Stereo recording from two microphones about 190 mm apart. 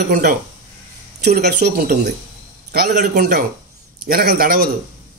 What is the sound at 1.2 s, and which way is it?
A man's voice, 60° right (ahead or behind).